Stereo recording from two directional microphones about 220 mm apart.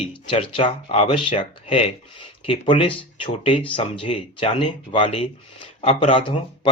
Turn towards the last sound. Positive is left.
turn(degrees=25)  # may be behind; listen again after turning